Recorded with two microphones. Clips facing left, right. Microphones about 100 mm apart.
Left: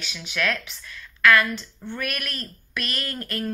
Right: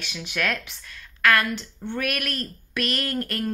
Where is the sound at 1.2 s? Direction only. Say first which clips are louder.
Left 2 dB; 50° right (ahead or behind).